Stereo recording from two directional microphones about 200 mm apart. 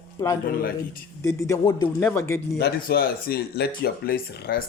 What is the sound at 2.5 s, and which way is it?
Speech, 55° left (ahead or behind).